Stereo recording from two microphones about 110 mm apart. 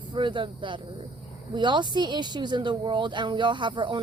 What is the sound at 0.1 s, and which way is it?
Speech, 45° right (ahead or behind).